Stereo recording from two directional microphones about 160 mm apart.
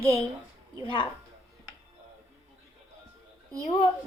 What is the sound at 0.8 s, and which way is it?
Speech, 30° left (ahead or behind).